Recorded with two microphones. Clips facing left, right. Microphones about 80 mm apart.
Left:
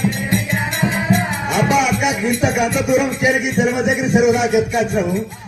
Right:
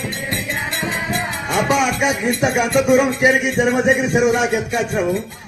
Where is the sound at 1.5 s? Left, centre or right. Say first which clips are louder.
Left 1 dB; right.